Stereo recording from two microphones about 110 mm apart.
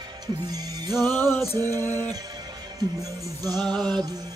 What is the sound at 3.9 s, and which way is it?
Music, 35° right (ahead or behind).